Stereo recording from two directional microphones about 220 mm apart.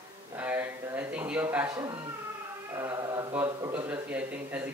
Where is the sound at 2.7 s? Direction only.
10° right (ahead or behind).